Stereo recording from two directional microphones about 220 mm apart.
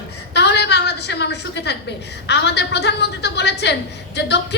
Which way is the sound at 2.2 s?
50° left (ahead or behind).